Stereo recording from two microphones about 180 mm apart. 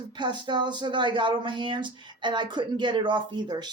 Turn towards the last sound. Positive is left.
turn(degrees=-25)  # may be behind; listen again after turning